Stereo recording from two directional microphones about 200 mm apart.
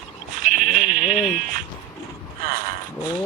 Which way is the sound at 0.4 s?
40° right (ahead or behind).